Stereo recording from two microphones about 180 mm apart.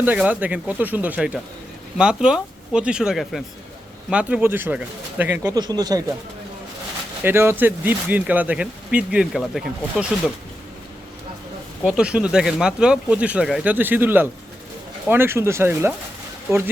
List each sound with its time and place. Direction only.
0.0 s speech: 10° right (ahead or behind)
7.3 s speech: 15° right (ahead or behind)
11.9 s speech: 5° right (ahead or behind)